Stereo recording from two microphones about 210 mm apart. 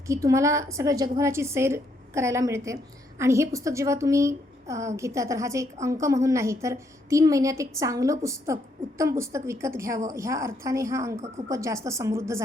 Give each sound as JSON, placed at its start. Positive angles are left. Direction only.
{"t": 0.1, "sound": "a woman's voice", "side_deg": -15}